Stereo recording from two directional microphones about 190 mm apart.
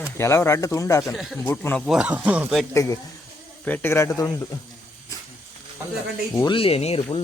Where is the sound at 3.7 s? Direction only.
10° left (ahead or behind).